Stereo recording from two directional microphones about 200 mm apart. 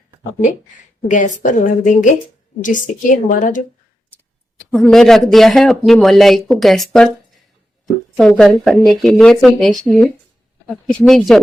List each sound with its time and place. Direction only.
1.0 s a woman's voice: 40° left (ahead or behind)
4.5 s speech: centre (ahead or behind)
8.4 s speech: centre (ahead or behind)